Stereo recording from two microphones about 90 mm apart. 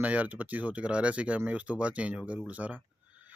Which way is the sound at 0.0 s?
15° right (ahead or behind).